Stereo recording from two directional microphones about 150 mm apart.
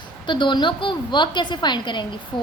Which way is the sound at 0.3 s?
30° left (ahead or behind).